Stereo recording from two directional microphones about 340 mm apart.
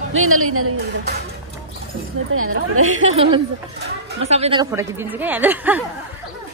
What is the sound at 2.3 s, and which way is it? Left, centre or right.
Speech, right.